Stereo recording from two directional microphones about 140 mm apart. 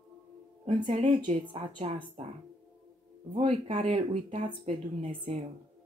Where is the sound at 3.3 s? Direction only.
45° right (ahead or behind).